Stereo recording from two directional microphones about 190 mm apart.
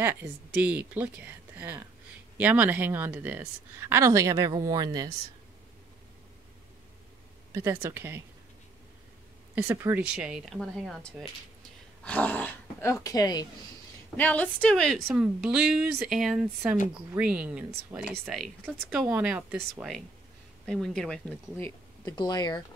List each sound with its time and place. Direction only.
0.0 s speech: 10° right (ahead or behind)
7.5 s speech: 15° right (ahead or behind)
9.6 s speech: 10° right (ahead or behind); by 13.5 s 20° left (ahead or behind)
14.1 s a woman's voice: 10° left (ahead or behind); by 18.1 s 10° right (ahead or behind)
18.2 s speech: centre (ahead or behind)
22.0 s speech: 20° left (ahead or behind)